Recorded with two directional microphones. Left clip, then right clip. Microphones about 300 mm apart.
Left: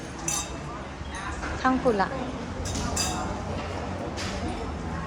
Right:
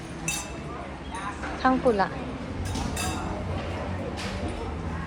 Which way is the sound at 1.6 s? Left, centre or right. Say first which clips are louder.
Right 1 dB; centre.